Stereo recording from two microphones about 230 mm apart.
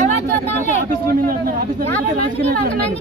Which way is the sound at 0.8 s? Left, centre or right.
Right.